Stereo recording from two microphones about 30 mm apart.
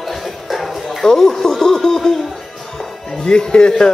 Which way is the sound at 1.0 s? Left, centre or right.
Centre.